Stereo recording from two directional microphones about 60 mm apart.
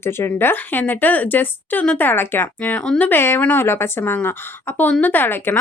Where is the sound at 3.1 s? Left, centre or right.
Left.